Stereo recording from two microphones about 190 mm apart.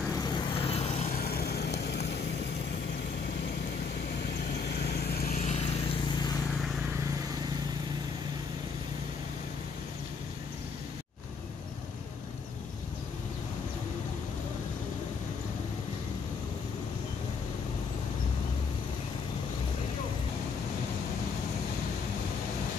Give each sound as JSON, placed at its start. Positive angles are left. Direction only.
{"t": 0.1, "sound": "vehicle", "side_deg": 25}
{"t": 5.0, "sound": "vehicle", "side_deg": 50}